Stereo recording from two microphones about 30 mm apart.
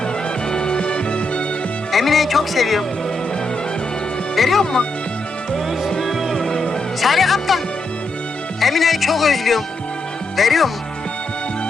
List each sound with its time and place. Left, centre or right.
0.5 s music: left
1.9 s speech: centre
4.4 s speech: centre
6.3 s music: centre
7.0 s speech: centre
8.6 s speech: centre